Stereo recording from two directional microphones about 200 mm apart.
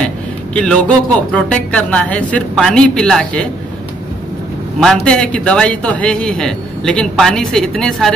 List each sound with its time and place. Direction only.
0.6 s a man's voice: 5° left (ahead or behind)
4.7 s a man's voice: 5° left (ahead or behind)